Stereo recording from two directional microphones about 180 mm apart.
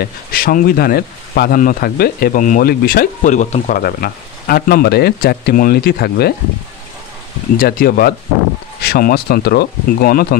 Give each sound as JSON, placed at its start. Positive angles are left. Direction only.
{"t": 0.0, "sound": "speech", "side_deg": 55}
{"t": 7.5, "sound": "speech", "side_deg": 55}